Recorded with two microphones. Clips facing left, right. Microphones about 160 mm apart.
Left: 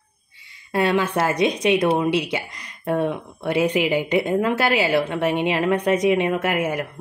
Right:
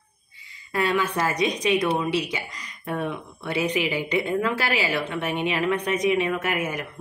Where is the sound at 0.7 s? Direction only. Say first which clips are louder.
Left 4 dB; 70° left (ahead or behind).